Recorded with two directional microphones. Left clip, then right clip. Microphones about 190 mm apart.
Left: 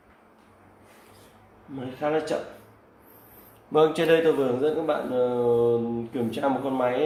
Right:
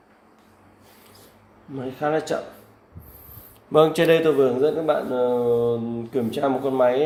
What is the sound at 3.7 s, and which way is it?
A man's voice, 50° right (ahead or behind).